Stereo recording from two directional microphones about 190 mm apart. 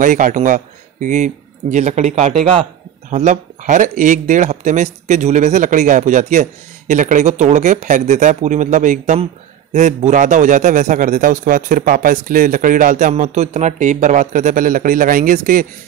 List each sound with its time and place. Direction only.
0.0 s a man's voice: 45° right (ahead or behind)